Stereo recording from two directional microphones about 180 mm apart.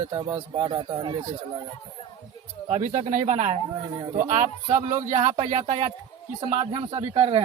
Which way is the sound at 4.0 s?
25° right (ahead or behind).